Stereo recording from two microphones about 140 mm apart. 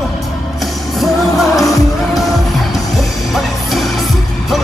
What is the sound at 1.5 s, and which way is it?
Music, 25° left (ahead or behind).